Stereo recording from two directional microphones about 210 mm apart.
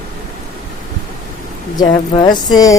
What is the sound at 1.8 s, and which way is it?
Speech, 20° left (ahead or behind).